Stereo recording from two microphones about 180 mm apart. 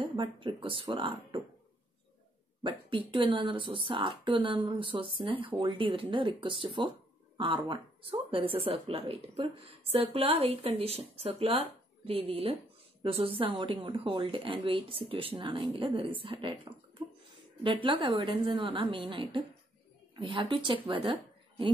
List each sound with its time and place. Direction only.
0.0 s speech: 30° right (ahead or behind)
2.6 s speech: 30° right (ahead or behind)
17.8 s a woman's voice: 30° right (ahead or behind)